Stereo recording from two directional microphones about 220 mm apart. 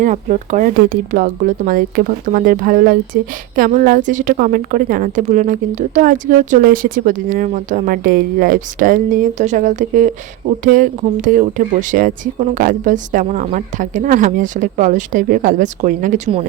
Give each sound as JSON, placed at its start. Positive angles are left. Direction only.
{"t": 0.0, "sound": "a woman's voice", "side_deg": -35}